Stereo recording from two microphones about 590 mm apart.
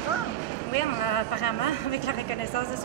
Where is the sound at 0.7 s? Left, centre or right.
Left.